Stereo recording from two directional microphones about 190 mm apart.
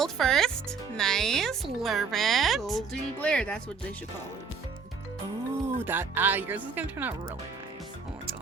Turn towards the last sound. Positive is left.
turn(degrees=-10)  # may be behind; listen again after turning